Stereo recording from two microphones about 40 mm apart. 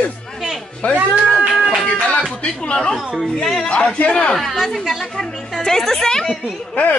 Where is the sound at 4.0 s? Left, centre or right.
Left.